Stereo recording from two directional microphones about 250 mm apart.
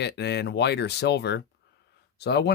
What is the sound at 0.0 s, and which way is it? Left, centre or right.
Speech, left.